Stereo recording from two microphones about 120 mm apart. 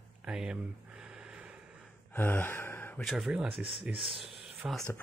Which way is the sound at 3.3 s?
10° right (ahead or behind).